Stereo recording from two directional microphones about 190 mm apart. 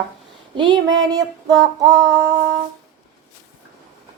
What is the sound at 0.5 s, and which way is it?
A woman's voice, 25° right (ahead or behind).